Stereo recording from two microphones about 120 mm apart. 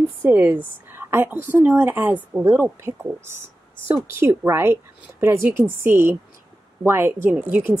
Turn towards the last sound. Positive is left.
turn(degrees=-15)  # may be behind; listen again after turning